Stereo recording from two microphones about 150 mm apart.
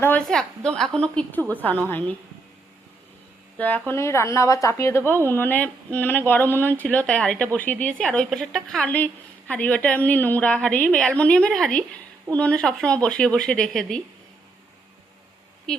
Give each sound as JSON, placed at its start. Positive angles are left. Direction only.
{"t": 0.0, "sound": "a woman's voice", "side_deg": 5}
{"t": 3.6, "sound": "a woman's voice", "side_deg": 10}